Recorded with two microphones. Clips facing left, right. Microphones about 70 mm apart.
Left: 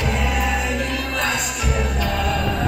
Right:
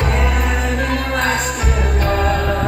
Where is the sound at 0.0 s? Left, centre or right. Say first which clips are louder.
Right 2 dB; right.